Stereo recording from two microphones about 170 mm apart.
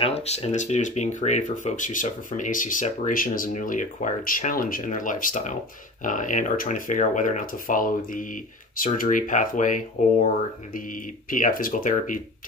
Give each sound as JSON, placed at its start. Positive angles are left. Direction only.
{"t": 0.0, "sound": "speech", "side_deg": 40}